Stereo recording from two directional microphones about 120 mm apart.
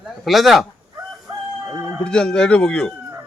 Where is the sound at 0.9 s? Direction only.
25° right (ahead or behind).